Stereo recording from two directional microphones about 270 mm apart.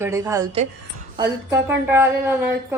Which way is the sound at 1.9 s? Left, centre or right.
Centre.